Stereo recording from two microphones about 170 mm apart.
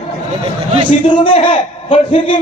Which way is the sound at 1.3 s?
35° left (ahead or behind).